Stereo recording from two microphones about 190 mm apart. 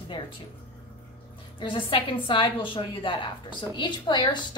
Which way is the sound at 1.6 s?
25° left (ahead or behind).